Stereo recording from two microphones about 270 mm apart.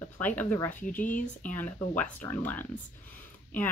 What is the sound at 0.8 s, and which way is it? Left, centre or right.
Speech, left.